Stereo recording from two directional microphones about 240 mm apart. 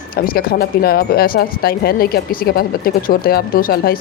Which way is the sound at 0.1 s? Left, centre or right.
Left.